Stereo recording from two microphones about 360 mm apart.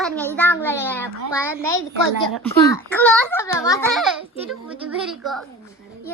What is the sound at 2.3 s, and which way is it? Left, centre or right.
A child's voice, centre.